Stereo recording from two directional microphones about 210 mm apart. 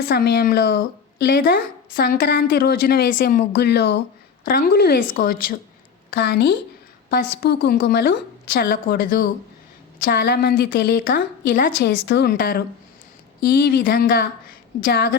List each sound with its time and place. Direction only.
0.1 s speech: 50° left (ahead or behind)